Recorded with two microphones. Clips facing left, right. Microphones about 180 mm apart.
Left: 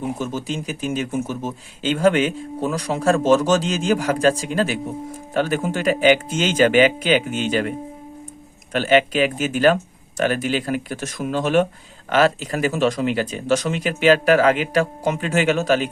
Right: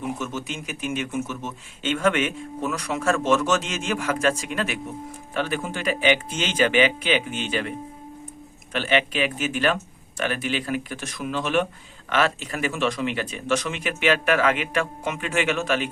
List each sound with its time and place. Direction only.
0.0 s speech: 35° left (ahead or behind)
8.7 s speech: 40° left (ahead or behind)